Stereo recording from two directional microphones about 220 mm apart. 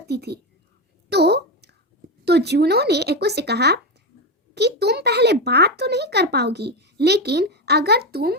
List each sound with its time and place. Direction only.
0.1 s a child's voice: 45° right (ahead or behind)
1.1 s a sound: 50° right (ahead or behind)
2.2 s a child's voice: 50° right (ahead or behind)